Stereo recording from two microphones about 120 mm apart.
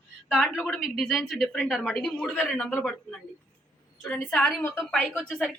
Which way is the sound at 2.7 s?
10° left (ahead or behind).